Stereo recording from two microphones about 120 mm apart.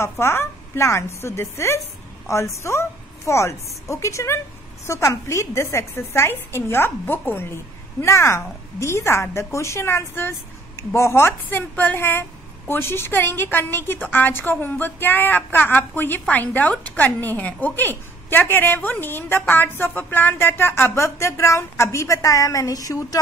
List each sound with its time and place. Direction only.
0.0 s a woman's voice: 20° left (ahead or behind)